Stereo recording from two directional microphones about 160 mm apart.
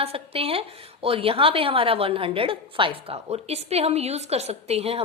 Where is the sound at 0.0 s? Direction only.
35° right (ahead or behind).